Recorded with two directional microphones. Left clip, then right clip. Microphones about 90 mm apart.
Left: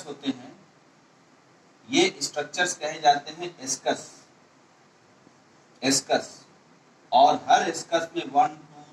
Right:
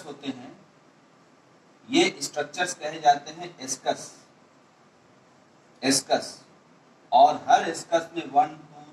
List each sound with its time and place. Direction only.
0.0 s a sound: 35° left (ahead or behind)
1.9 s a man's voice: 35° left (ahead or behind)
6.0 s a man's voice: 35° left (ahead or behind)